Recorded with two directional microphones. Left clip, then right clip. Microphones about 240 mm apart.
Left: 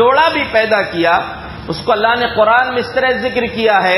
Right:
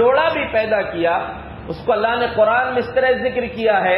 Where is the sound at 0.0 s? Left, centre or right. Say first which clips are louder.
Left 4 dB; left.